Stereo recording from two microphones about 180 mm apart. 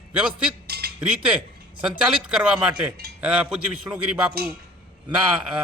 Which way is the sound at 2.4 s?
5° right (ahead or behind).